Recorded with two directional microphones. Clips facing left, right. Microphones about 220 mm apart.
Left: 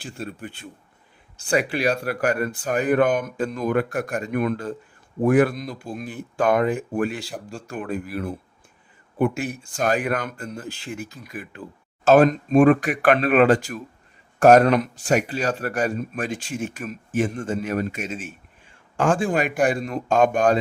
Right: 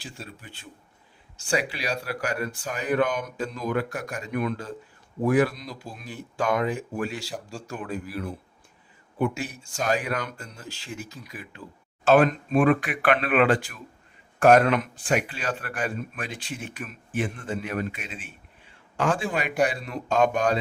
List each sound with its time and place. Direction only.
0.0 s speech: 55° left (ahead or behind)
12.0 s speech: 40° left (ahead or behind)